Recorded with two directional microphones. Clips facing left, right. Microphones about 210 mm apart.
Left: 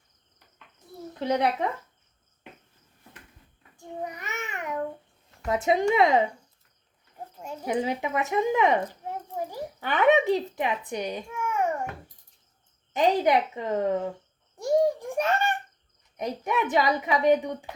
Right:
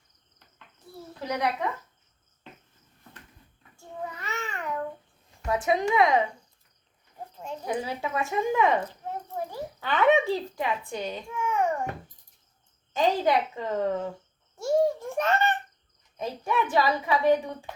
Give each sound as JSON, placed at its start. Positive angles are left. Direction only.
{"t": 1.2, "sound": "speech", "side_deg": 25}
{"t": 3.8, "sound": "child singing", "side_deg": 15}
{"t": 5.5, "sound": "a woman's voice", "side_deg": 25}
{"t": 7.6, "sound": "speech", "side_deg": 20}
{"t": 12.9, "sound": "a woman's voice", "side_deg": 20}
{"t": 14.6, "sound": "a sound", "side_deg": 15}
{"t": 16.1, "sound": "a woman's voice", "side_deg": 15}